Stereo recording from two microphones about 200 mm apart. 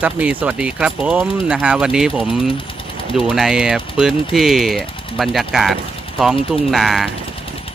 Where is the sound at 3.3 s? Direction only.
5° right (ahead or behind).